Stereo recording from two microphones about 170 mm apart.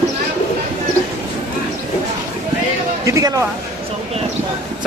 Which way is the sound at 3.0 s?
20° right (ahead or behind).